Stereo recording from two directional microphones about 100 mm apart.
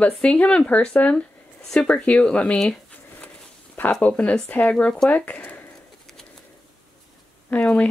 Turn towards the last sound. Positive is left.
turn(degrees=10)  # may be behind; listen again after turning